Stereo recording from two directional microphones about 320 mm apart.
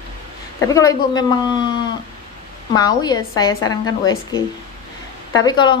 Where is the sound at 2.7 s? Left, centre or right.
Centre.